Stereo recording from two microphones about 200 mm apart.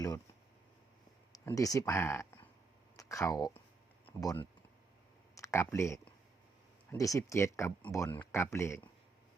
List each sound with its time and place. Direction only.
1.3 s speech: 15° left (ahead or behind)